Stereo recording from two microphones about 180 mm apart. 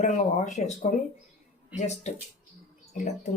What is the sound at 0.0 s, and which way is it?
Speech, 40° left (ahead or behind).